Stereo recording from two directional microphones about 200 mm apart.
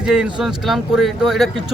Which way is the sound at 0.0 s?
5° right (ahead or behind).